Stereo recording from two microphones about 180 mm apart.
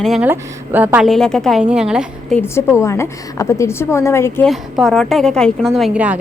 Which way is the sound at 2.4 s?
10° left (ahead or behind).